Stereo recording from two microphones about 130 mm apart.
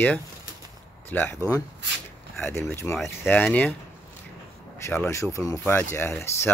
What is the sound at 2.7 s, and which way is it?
Speech, 20° left (ahead or behind).